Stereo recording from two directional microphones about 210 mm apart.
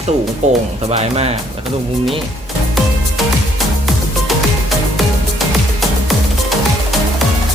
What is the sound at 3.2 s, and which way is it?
Music, centre (ahead or behind).